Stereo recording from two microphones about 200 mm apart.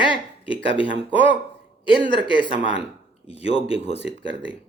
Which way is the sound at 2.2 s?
25° left (ahead or behind).